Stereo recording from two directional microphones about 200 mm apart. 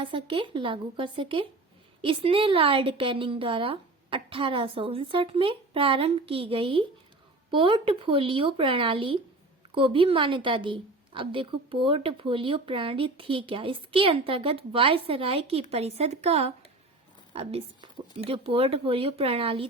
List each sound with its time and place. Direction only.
0.0 s a woman's voice: 25° right (ahead or behind)